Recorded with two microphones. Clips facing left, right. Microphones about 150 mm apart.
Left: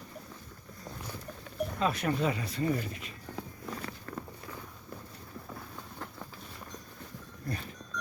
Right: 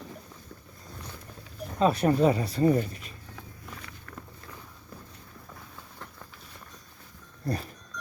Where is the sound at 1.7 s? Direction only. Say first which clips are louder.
Right 8 dB; 35° right (ahead or behind).